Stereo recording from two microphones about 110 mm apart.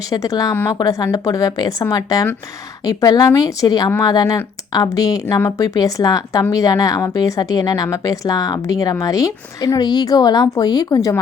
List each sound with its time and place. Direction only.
0.1 s a woman's voice: 35° left (ahead or behind)